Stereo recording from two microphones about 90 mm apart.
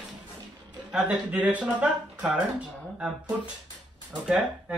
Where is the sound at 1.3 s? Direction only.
15° right (ahead or behind).